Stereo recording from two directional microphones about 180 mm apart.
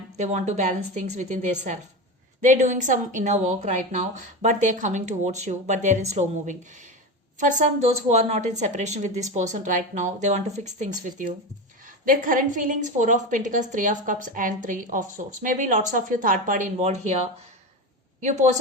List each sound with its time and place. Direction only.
0.2 s a woman's voice: 40° right (ahead or behind)
18.2 s a woman's voice: 40° right (ahead or behind)